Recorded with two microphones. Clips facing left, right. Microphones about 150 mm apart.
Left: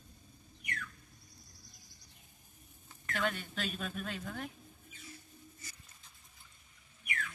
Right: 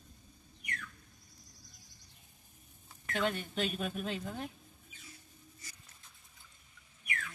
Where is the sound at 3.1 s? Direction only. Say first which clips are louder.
Right 2 dB; 20° right (ahead or behind).